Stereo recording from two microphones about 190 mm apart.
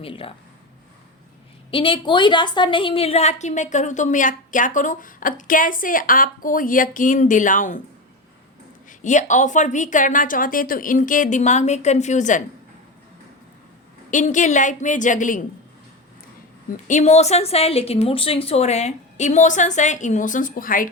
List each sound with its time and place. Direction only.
0.0 s speech: 30° left (ahead or behind)
1.7 s a woman's voice: 25° left (ahead or behind); by 7.8 s 40° left (ahead or behind)
8.9 s a woman's voice: 40° left (ahead or behind)
14.1 s a woman's voice: 40° left (ahead or behind)
16.9 s a woman's voice: 35° left (ahead or behind)